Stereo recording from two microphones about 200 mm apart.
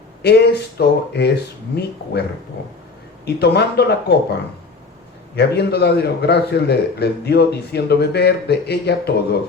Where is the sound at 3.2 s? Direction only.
55° left (ahead or behind).